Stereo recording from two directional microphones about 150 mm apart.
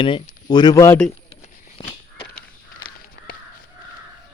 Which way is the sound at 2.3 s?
75° left (ahead or behind).